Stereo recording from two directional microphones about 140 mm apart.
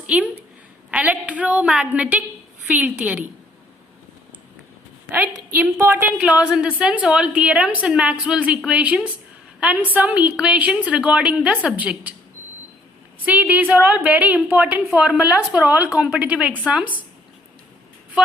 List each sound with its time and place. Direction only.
0.9 s a woman's voice: 10° right (ahead or behind)
5.8 s a woman's voice: 15° right (ahead or behind)
13.2 s a woman's voice: 10° right (ahead or behind)